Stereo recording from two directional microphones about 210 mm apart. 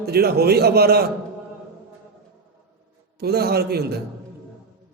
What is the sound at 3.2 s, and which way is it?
Speech, 50° right (ahead or behind).